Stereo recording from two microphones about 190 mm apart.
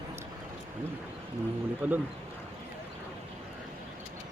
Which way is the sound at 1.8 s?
5° right (ahead or behind).